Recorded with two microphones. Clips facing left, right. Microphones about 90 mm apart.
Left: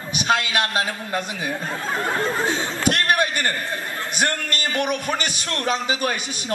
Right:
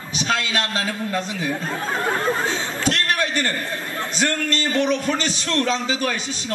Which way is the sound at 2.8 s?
55° left (ahead or behind).